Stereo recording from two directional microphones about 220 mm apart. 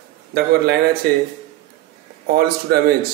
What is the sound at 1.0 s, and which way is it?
Speech, 45° right (ahead or behind).